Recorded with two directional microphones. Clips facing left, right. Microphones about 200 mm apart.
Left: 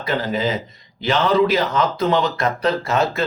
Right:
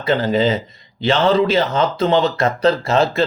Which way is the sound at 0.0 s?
30° right (ahead or behind).